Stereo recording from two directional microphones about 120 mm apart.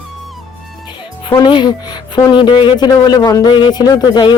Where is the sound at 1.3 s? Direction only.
40° left (ahead or behind).